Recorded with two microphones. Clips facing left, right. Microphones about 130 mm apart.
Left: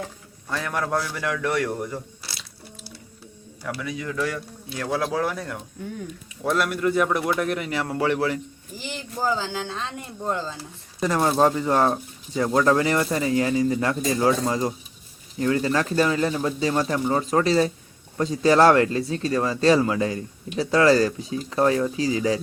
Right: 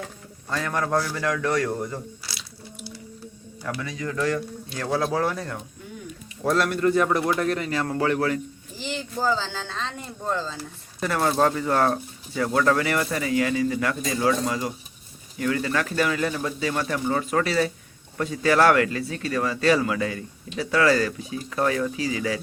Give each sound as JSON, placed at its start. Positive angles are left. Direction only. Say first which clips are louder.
{"t": 0.5, "sound": "speech", "louder": "right 1 dB", "side_deg": 10}
{"t": 3.8, "sound": "speech", "louder": "even", "side_deg": 5}
{"t": 7.4, "sound": "speech", "louder": "right 1 dB", "side_deg": 15}